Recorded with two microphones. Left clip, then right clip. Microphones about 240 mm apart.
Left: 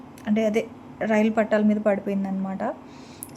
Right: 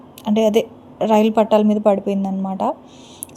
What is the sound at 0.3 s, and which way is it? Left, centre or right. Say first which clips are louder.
A woman's voice: right 7 dB; centre.